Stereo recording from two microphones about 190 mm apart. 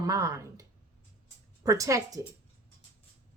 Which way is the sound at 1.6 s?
15° right (ahead or behind).